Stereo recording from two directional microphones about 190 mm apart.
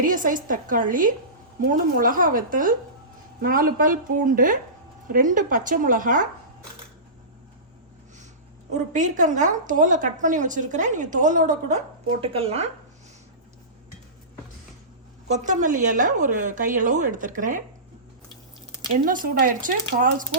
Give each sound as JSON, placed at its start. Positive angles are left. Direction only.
{"t": 0.0, "sound": "a woman's voice", "side_deg": -45}
{"t": 8.7, "sound": "a woman's voice", "side_deg": -40}
{"t": 12.2, "sound": "a woman's voice", "side_deg": -30}
{"t": 15.3, "sound": "a woman's voice", "side_deg": -40}
{"t": 19.0, "sound": "a woman's voice", "side_deg": -45}